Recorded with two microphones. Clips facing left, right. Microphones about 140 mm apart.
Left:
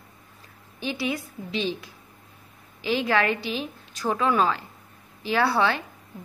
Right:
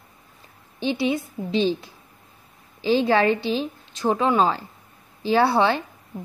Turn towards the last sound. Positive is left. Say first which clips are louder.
# right 4 dB
turn(degrees=-25)  # may be behind; listen again after turning